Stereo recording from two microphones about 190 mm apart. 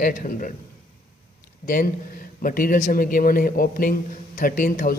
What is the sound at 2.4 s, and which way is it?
A man's voice, 45° left (ahead or behind).